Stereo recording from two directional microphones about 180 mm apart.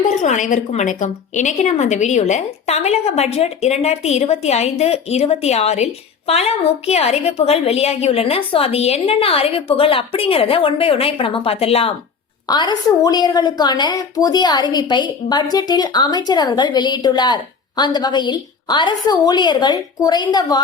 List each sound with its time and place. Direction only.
0.1 s a woman's voice: 45° left (ahead or behind); by 20.6 s 20° left (ahead or behind)